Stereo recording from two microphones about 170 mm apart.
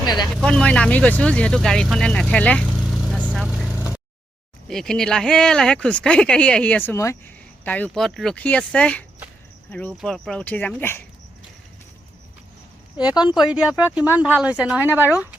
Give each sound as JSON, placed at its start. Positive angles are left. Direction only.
{"t": 0.0, "sound": "speech", "side_deg": 25}
{"t": 0.3, "sound": "speech", "side_deg": 5}
{"t": 3.1, "sound": "vehicle", "side_deg": -5}
{"t": 4.7, "sound": "speech", "side_deg": 5}
{"t": 13.3, "sound": "speech", "side_deg": 0}